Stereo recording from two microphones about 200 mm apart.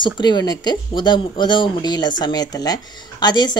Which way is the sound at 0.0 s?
20° left (ahead or behind).